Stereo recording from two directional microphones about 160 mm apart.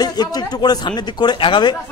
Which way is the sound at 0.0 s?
25° left (ahead or behind).